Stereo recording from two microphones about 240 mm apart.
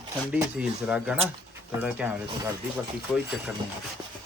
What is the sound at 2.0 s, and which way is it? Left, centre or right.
Speech, centre.